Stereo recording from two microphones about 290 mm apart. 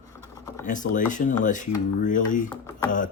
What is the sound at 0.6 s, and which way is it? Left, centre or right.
Speech, left.